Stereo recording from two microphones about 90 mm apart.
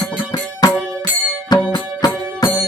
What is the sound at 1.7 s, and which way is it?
Music, 55° left (ahead or behind).